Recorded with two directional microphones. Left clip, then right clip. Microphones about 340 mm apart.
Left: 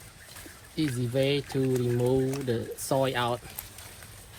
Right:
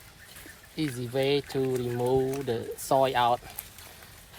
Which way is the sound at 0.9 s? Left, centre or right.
Centre.